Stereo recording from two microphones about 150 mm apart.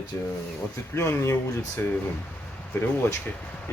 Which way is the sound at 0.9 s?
20° left (ahead or behind).